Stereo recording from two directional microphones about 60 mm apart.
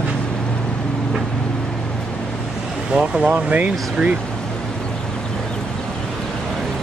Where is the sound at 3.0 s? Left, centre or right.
Centre.